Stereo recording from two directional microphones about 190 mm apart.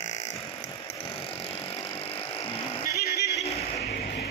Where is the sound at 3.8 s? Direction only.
60° left (ahead or behind).